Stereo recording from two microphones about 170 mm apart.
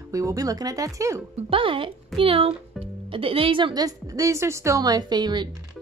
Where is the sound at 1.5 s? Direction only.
30° right (ahead or behind).